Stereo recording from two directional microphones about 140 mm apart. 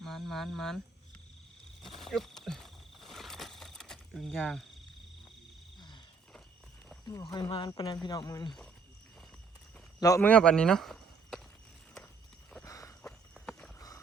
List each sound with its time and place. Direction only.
0.0 s speech: centre (ahead or behind)
1.8 s a sound: centre (ahead or behind)
6.8 s speech: 20° left (ahead or behind)
10.2 s speech: 10° left (ahead or behind)
12.6 s walk: 25° left (ahead or behind)
13.0 s walk: 10° left (ahead or behind)
13.7 s a sound: 25° left (ahead or behind)